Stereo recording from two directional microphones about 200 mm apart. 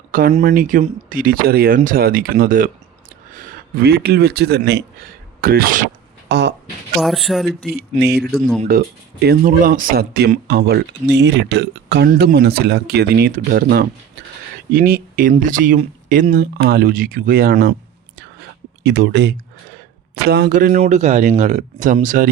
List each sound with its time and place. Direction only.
0.1 s speech: 45° right (ahead or behind)
6.2 s speech: 60° right (ahead or behind)
7.0 s speech: centre (ahead or behind)
7.6 s speech: 50° right (ahead or behind)
8.3 s speech: 5° left (ahead or behind)
9.2 s speech: 50° right (ahead or behind)
18.2 s whispering: 60° right (ahead or behind)
20.2 s speech: 50° right (ahead or behind)